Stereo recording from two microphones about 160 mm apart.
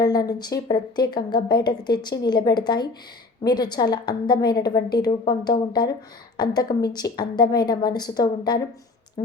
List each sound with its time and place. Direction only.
0.0 s a woman's voice: 25° left (ahead or behind)